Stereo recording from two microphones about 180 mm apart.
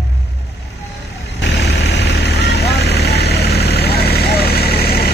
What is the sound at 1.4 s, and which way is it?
Vehicle, 70° left (ahead or behind).